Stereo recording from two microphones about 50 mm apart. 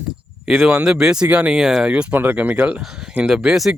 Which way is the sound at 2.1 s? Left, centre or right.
Right.